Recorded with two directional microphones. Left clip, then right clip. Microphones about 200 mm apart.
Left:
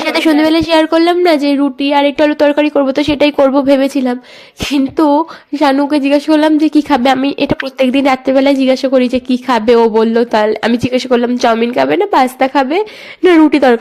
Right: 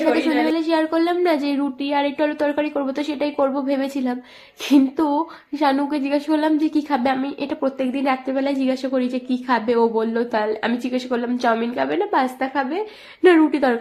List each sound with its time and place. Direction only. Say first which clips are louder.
0.1 s a woman's voice: left 11 dB; 45° left (ahead or behind)